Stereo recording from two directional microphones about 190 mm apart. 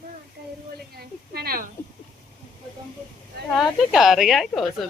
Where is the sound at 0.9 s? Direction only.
55° right (ahead or behind).